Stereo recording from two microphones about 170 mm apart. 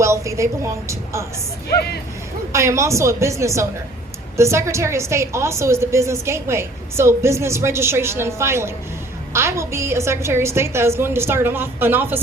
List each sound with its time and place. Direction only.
0.0 s a woman's voice: 15° right (ahead or behind)
2.5 s a woman's voice: 15° right (ahead or behind)